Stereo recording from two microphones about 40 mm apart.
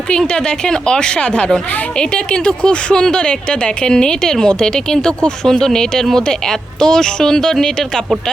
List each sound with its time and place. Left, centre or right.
0.1 s speech: centre